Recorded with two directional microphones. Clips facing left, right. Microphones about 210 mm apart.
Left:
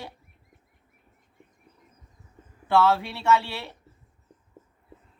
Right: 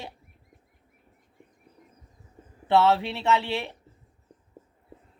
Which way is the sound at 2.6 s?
20° right (ahead or behind).